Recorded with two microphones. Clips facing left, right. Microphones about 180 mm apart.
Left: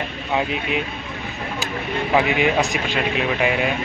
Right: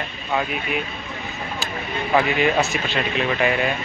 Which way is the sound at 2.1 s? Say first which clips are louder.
Even; 15° left (ahead or behind).